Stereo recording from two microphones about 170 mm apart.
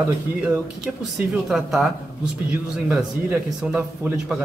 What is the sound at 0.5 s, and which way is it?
Speech, centre (ahead or behind).